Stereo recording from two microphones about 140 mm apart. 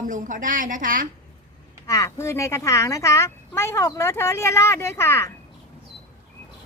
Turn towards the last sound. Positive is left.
turn(degrees=20)  # may be behind; listen again after turning